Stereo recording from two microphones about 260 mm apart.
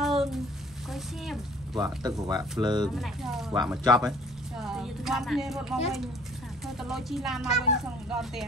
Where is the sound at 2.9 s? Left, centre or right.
Centre.